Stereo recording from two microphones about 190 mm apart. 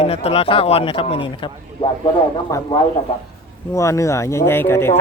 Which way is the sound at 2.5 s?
15° left (ahead or behind).